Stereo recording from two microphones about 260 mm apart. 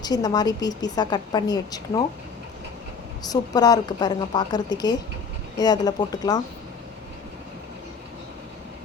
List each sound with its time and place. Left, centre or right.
0.0 s a woman's voice: centre
3.2 s a woman's voice: centre